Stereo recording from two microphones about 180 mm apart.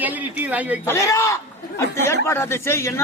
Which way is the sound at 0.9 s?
15° left (ahead or behind).